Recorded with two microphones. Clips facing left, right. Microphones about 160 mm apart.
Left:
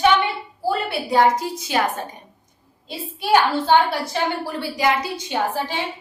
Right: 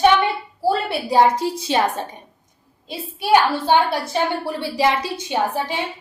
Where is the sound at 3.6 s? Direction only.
20° right (ahead or behind).